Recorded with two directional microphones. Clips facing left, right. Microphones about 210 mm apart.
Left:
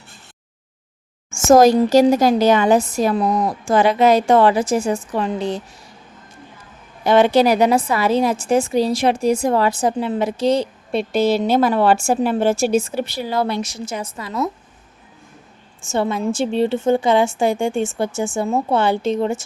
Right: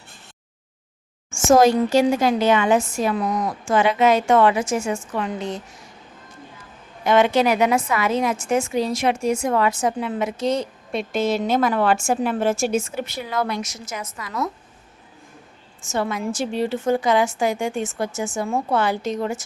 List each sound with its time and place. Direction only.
1.3 s a woman's voice: 40° left (ahead or behind)
7.0 s a woman's voice: 35° left (ahead or behind)
15.8 s a woman's voice: 25° left (ahead or behind)